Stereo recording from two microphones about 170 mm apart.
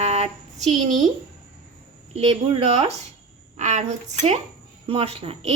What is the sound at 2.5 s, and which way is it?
A woman's voice, 35° right (ahead or behind).